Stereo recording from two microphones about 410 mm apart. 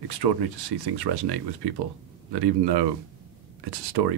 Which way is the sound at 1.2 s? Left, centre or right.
Right.